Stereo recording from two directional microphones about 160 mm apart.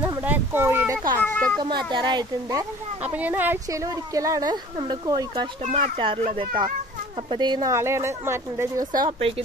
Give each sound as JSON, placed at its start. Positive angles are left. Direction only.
{"t": 0.0, "sound": "a sound", "side_deg": -10}
{"t": 1.2, "sound": "speech", "side_deg": 10}
{"t": 1.6, "sound": "speech", "side_deg": -30}
{"t": 3.0, "sound": "speech", "side_deg": -10}
{"t": 5.6, "sound": "speech", "side_deg": -45}